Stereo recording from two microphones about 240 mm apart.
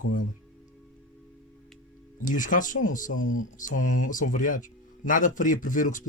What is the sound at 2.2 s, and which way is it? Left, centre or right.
Speech, left.